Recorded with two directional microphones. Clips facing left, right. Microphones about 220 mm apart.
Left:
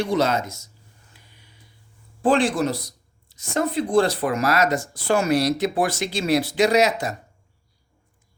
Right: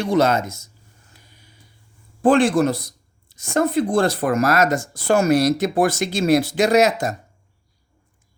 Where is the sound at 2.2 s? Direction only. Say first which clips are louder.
Right 4 dB; 50° right (ahead or behind).